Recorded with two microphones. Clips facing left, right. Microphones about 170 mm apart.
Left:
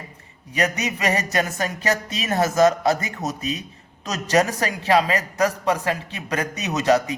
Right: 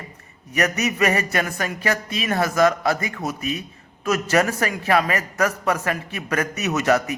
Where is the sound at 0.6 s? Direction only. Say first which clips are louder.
Right 2 dB; 15° left (ahead or behind).